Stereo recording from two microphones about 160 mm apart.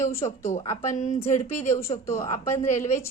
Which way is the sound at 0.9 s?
50° left (ahead or behind).